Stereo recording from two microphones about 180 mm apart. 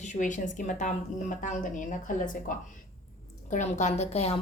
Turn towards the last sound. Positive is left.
turn(degrees=35)  # may be behind; listen again after turning